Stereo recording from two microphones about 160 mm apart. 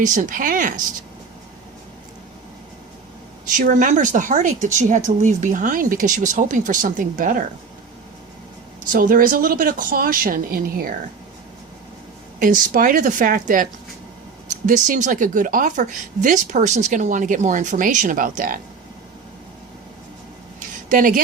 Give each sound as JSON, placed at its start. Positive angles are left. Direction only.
{"t": 0.0, "sound": "speech", "side_deg": -55}
{"t": 3.5, "sound": "speech", "side_deg": -55}
{"t": 8.9, "sound": "speech", "side_deg": -60}
{"t": 12.4, "sound": "speech", "side_deg": -60}
{"t": 14.7, "sound": "speech", "side_deg": -50}
{"t": 20.6, "sound": "a sound", "side_deg": -55}